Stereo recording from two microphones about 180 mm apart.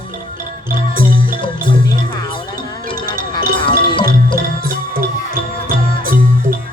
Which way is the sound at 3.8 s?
25° left (ahead or behind).